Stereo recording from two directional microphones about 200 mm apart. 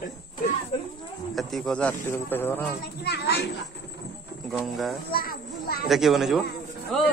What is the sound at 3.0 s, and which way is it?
Speech, 55° left (ahead or behind).